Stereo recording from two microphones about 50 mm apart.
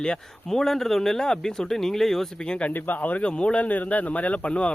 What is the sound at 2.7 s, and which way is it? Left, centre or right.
Speech, left.